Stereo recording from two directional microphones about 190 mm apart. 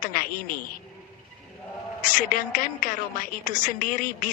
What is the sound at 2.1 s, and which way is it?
Speech, 45° left (ahead or behind).